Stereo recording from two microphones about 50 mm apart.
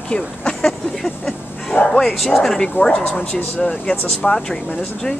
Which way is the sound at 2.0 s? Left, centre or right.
Centre.